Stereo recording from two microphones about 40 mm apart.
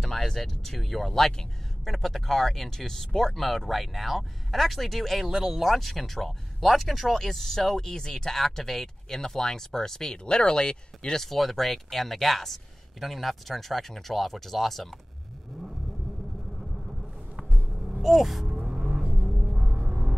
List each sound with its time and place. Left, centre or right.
0.0 s speech: centre
5.3 s speech: centre
5.7 s speech: centre
11.1 s speech: centre
18.0 s gasp: centre
19.2 s music: centre